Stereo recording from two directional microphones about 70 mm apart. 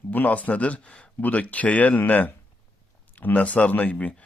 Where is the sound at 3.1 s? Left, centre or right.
Left.